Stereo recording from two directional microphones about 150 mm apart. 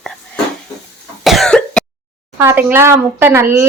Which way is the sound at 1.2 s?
Centre (ahead or behind).